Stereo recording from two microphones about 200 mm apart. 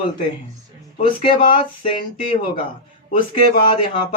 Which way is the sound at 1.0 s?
25° left (ahead or behind).